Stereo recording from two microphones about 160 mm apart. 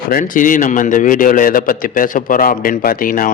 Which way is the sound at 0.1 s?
55° left (ahead or behind).